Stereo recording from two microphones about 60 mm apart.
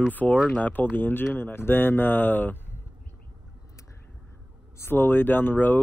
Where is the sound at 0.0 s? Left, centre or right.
Left.